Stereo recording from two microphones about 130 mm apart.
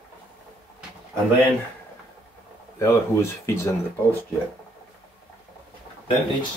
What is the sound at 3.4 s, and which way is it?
Speech, 20° left (ahead or behind).